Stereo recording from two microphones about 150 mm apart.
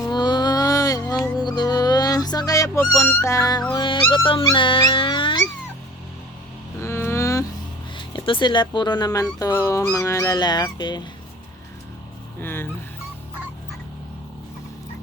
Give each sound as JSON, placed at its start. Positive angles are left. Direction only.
{"t": 0.0, "sound": "music", "side_deg": 30}
{"t": 3.7, "sound": "dog", "side_deg": 30}
{"t": 6.7, "sound": "vehicle", "side_deg": 15}
{"t": 7.9, "sound": "speech", "side_deg": 35}
{"t": 12.4, "sound": "speech", "side_deg": 15}